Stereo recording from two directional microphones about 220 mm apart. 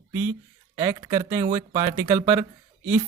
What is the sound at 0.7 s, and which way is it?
Speech, 15° right (ahead or behind).